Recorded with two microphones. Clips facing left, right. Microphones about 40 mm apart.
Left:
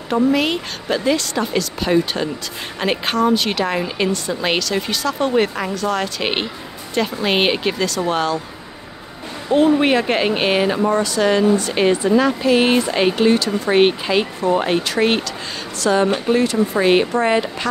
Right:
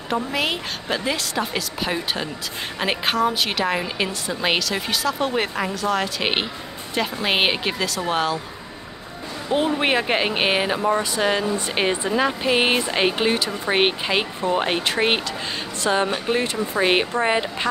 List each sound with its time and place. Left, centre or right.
0.1 s a woman's voice: centre
9.8 s speech: centre